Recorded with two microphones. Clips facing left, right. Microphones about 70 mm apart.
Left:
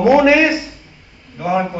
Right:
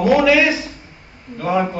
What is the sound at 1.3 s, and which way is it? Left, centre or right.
Speech, centre.